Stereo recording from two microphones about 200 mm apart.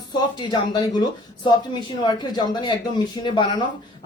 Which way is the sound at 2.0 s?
20° left (ahead or behind).